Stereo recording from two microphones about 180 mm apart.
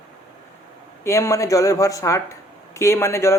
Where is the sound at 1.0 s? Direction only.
15° left (ahead or behind).